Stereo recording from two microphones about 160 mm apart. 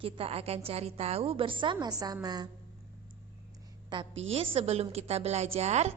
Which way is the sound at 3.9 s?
35° right (ahead or behind).